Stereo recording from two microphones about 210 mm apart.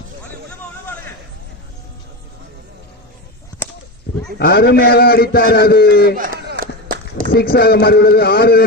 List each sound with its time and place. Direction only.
3.5 s a sound: 5° left (ahead or behind)
4.4 s a man's voice: 50° left (ahead or behind)
6.1 s run: 40° right (ahead or behind)
7.3 s a man's voice: 45° left (ahead or behind)